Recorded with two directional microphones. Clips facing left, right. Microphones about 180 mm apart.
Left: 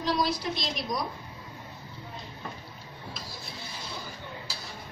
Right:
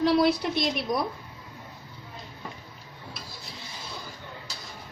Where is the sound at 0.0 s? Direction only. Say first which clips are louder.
Right 7 dB; 60° right (ahead or behind).